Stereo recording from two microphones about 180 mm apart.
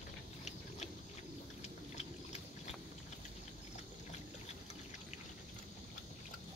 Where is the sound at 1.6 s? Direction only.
35° left (ahead or behind).